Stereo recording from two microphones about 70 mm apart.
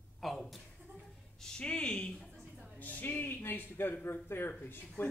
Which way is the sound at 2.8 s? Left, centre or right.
Left.